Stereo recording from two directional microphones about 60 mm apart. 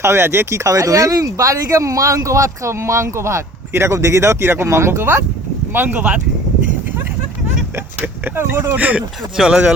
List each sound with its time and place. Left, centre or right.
0.0 s speech: right
5.7 s speech: right
8.0 s speech: right
8.7 s speech: right
9.4 s speech: centre